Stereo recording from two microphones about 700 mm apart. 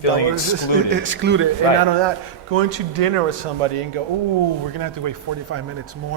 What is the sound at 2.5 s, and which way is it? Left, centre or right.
Speech, right.